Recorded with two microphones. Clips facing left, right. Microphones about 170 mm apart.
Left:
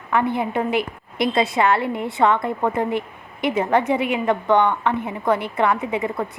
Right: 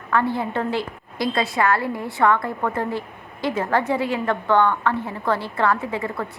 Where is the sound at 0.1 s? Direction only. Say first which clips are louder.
Left 1 dB; 20° left (ahead or behind).